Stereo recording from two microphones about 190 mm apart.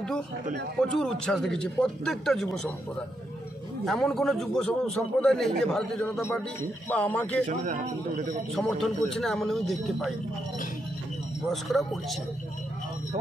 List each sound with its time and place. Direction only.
0.7 s speech: 5° left (ahead or behind)
3.8 s speech: centre (ahead or behind)
7.4 s a man's voice: 40° right (ahead or behind)
8.5 s speech: centre (ahead or behind)
11.5 s speech: centre (ahead or behind)